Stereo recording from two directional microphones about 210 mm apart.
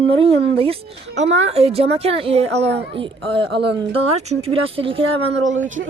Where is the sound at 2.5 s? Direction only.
55° right (ahead or behind).